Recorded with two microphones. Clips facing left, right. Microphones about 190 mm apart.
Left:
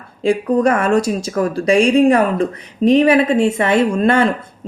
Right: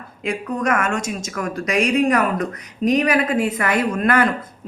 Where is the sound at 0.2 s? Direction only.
30° left (ahead or behind).